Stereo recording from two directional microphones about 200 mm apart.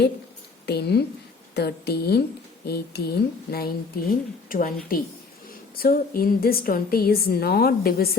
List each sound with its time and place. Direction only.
0.6 s a woman's voice: 55° left (ahead or behind)